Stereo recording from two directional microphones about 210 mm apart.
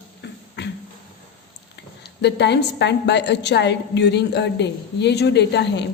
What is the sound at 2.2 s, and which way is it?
A woman's voice, 55° left (ahead or behind).